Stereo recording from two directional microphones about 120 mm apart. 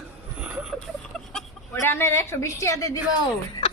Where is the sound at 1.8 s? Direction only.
20° left (ahead or behind).